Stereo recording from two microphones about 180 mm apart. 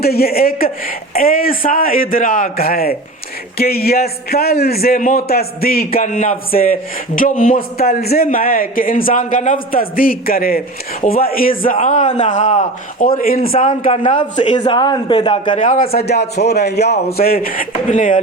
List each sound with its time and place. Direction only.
0.0 s a man's voice: 60° left (ahead or behind)
13.5 s a man's voice: 40° left (ahead or behind)
14.5 s a man's voice: 25° left (ahead or behind)
15.5 s a man's voice: 45° left (ahead or behind)
16.0 s a man's voice: 65° left (ahead or behind); by 18.2 s 45° left (ahead or behind)